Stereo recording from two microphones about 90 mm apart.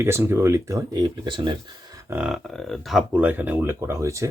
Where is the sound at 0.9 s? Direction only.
55° right (ahead or behind).